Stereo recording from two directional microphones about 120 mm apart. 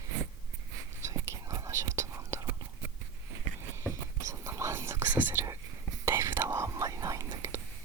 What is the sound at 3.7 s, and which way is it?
Whispering, 25° right (ahead or behind).